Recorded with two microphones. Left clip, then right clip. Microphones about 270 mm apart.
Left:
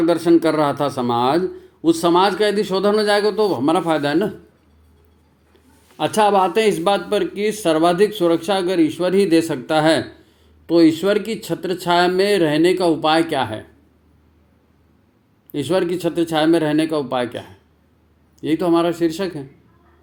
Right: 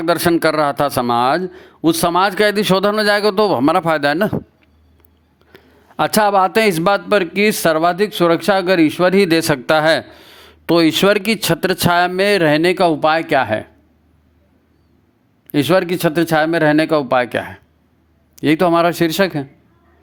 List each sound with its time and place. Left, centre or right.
0.0 s a man's voice: right
5.5 s a man's voice: right
15.5 s a man's voice: right